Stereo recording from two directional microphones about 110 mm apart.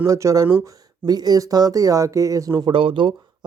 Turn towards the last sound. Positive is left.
turn(degrees=-50)  # may be behind; listen again after turning